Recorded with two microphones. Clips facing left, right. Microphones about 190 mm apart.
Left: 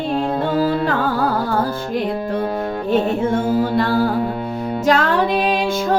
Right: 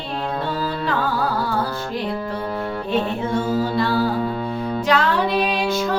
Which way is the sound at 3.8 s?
50° left (ahead or behind).